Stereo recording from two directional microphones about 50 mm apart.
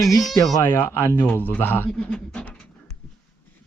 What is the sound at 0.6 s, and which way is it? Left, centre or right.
Speech, left.